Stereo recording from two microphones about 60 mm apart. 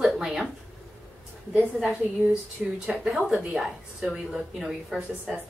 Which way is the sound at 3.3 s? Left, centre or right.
Right.